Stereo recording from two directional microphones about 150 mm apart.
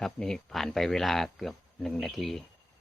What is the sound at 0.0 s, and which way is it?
Speech, 5° left (ahead or behind).